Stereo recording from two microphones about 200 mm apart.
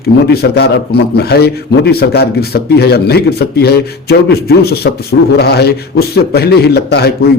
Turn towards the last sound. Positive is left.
turn(degrees=50)  # may be behind; listen again after turning